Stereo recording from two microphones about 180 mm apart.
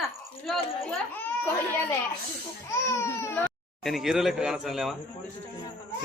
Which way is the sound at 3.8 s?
Centre (ahead or behind).